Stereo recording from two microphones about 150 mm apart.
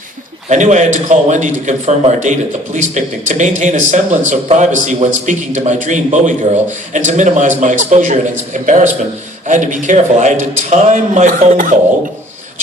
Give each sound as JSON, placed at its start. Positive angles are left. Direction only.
{"t": 0.4, "sound": "a man's voice", "side_deg": -50}